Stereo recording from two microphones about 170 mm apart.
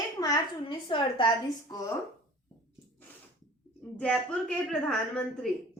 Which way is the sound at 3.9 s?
10° left (ahead or behind).